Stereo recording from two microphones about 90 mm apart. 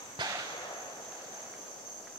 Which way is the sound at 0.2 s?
55° right (ahead or behind).